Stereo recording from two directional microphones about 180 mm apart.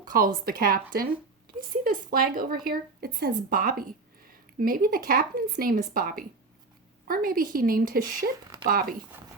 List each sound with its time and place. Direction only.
0.0 s speech: 50° right (ahead or behind)